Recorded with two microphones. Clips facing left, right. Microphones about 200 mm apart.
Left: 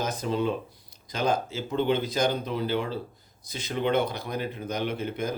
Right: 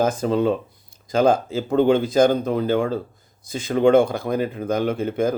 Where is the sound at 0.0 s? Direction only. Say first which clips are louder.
Right 8 dB; 50° right (ahead or behind).